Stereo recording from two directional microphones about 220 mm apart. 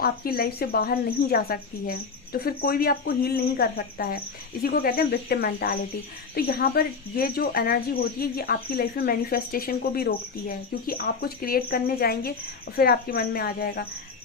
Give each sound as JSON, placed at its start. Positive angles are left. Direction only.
{"t": 0.0, "sound": "speech", "side_deg": 45}